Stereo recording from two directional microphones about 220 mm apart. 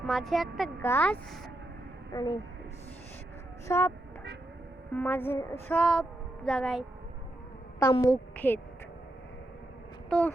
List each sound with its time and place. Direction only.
0.0 s a woman's voice: centre (ahead or behind)
3.7 s a woman's voice: 10° left (ahead or behind)
4.9 s a woman's voice: 10° left (ahead or behind)
7.8 s a woman's voice: 15° left (ahead or behind)
10.1 s speech: 5° left (ahead or behind)